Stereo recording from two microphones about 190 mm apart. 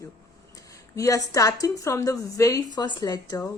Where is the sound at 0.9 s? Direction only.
15° left (ahead or behind).